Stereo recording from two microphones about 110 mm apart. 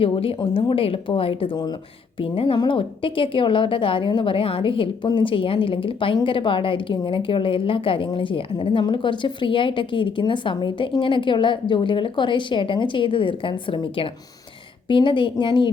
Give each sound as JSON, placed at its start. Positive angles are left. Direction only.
{"t": 0.0, "sound": "a woman's voice", "side_deg": 55}